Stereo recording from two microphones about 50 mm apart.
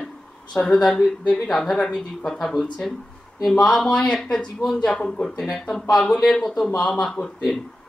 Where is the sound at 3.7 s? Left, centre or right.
Centre.